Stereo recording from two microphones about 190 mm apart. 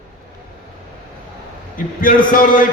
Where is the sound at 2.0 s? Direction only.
45° left (ahead or behind).